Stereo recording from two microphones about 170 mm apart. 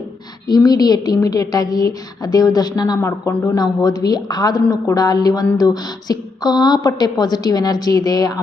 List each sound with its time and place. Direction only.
0.4 s a woman's voice: 25° left (ahead or behind)